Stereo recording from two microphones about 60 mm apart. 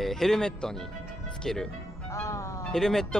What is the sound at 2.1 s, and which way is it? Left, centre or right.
Music, left.